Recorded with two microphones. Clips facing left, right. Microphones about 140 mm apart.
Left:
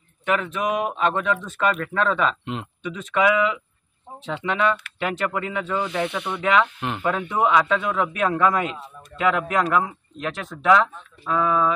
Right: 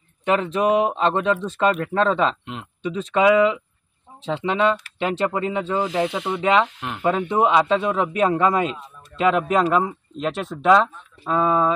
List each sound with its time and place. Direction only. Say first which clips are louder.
0.2 s speech: right 4 dB; 30° right (ahead or behind)
5.9 s speech: right 3 dB; 90° right
6.4 s speech: right 1 dB; 25° right (ahead or behind)